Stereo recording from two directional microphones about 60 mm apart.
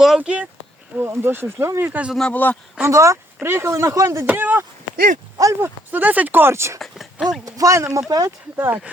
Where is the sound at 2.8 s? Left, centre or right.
Right.